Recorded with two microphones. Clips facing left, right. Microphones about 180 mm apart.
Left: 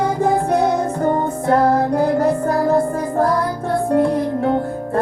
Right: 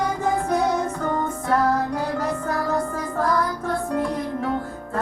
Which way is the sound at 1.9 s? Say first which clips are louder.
Left 9 dB; 60° left (ahead or behind).